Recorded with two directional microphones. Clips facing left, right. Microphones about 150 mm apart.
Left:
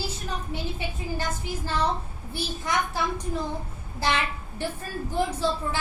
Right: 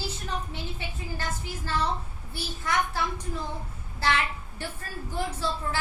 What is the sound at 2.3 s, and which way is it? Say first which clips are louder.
A child's voice: left 2 dB; 15° left (ahead or behind).